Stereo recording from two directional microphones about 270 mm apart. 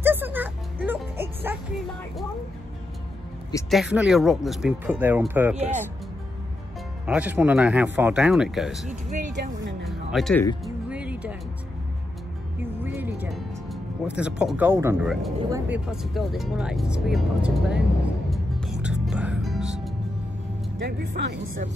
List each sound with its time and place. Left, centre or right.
0.0 s music: centre
3.7 s speech: centre
7.1 s speech: centre
9.4 s music: right
9.8 s music: centre
12.8 s music: centre
15.5 s speech: centre
18.3 s music: centre
20.8 s speech: right